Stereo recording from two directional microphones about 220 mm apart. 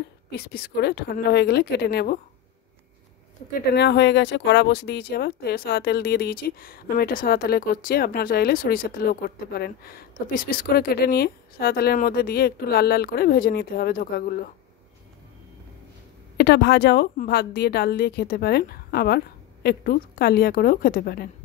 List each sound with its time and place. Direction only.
0.5 s speech: 45° left (ahead or behind)
3.7 s speech: 50° left (ahead or behind)
16.3 s speech: 50° left (ahead or behind)